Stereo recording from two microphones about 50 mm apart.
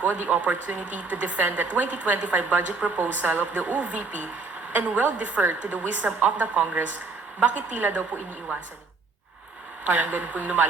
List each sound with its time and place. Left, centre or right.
0.0 s a woman's voice: right
5.9 s a woman's voice: right
6.1 s a woman's voice: right
9.8 s a woman's voice: right